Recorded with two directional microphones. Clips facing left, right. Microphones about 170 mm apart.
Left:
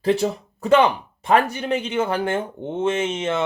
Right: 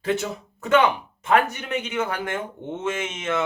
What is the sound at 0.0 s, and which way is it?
Speech, 35° left (ahead or behind).